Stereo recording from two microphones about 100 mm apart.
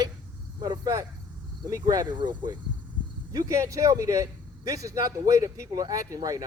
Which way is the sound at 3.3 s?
35° right (ahead or behind).